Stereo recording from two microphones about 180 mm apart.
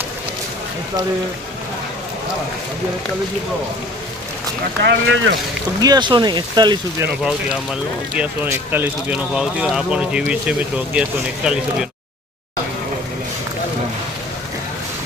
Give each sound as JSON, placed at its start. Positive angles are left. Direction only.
{"t": 4.8, "sound": "speech", "side_deg": -80}
{"t": 5.8, "sound": "speech", "side_deg": -25}
{"t": 7.2, "sound": "speech", "side_deg": -5}